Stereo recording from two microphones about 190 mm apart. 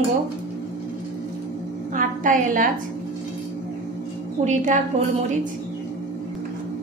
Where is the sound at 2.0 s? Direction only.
45° right (ahead or behind).